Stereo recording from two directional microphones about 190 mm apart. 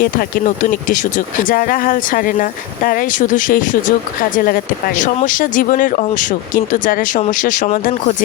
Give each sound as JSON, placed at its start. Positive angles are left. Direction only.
{"t": 0.0, "sound": "speech", "side_deg": 50}